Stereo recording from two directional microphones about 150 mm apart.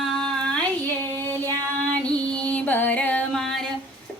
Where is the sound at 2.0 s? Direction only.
5° left (ahead or behind).